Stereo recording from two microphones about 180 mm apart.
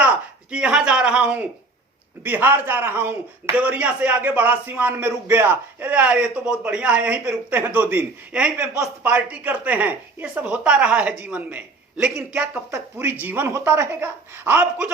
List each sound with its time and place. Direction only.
0.0 s speech: 5° right (ahead or behind)